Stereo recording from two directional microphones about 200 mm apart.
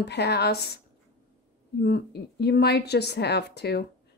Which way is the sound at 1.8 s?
55° left (ahead or behind).